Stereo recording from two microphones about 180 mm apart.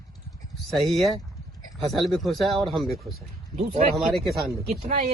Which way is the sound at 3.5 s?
40° right (ahead or behind).